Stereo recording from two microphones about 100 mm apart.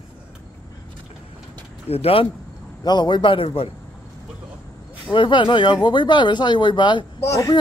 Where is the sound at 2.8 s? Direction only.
45° left (ahead or behind); by 3.7 s 70° left (ahead or behind).